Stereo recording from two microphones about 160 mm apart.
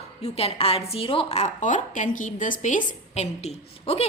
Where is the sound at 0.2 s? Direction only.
40° left (ahead or behind).